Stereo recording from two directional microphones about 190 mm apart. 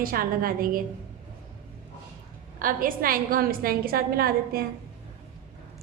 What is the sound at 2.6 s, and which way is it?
A woman's voice, 45° right (ahead or behind).